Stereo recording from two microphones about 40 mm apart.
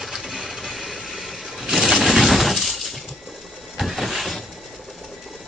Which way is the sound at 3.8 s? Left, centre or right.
Centre.